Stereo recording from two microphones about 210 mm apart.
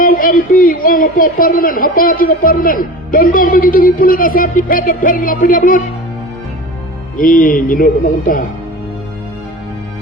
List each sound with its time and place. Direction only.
0.0 s a man's voice: 40° left (ahead or behind)
7.2 s a man's voice: 40° left (ahead or behind)